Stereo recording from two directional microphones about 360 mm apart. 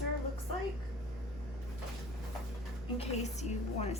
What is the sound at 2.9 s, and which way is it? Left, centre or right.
A woman's voice, centre.